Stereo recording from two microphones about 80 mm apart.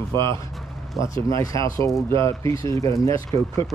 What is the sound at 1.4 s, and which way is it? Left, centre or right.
Speech, left.